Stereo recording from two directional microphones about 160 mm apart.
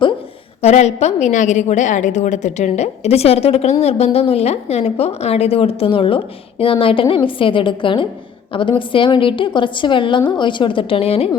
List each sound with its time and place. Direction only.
0.6 s a woman's voice: 45° left (ahead or behind)